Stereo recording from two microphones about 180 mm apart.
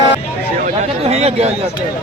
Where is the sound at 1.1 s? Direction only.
35° right (ahead or behind).